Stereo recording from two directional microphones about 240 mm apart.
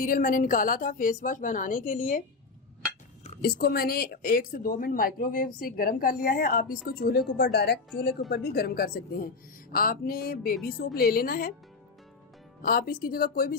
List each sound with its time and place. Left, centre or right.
0.0 s speech: left
3.2 s speech: left
12.6 s speech: left